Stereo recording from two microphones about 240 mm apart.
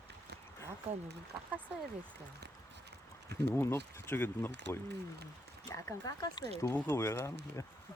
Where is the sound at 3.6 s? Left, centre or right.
Centre.